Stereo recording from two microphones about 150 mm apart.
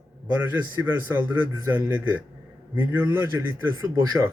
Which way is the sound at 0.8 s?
15° right (ahead or behind).